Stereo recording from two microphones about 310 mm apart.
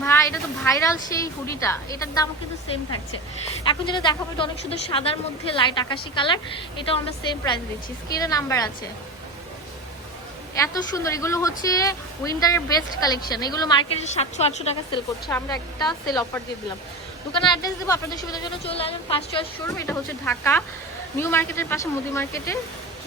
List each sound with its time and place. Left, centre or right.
0.0 s a sound: centre
1.1 s a woman's voice: centre
3.6 s a woman's voice: centre
10.6 s a woman's voice: centre
17.3 s a woman's voice: centre